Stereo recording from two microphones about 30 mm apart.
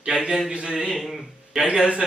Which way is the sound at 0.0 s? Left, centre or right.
Right.